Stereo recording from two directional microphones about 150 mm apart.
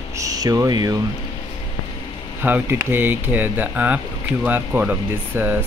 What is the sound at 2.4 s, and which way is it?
Speech, 15° right (ahead or behind).